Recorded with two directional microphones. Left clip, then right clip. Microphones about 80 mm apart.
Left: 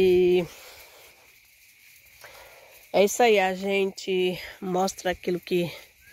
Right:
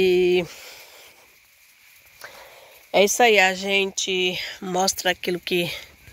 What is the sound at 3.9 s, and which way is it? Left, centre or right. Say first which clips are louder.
Speech: right 3 dB; left.